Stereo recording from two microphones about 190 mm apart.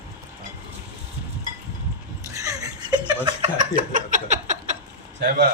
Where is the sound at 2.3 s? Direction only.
15° right (ahead or behind).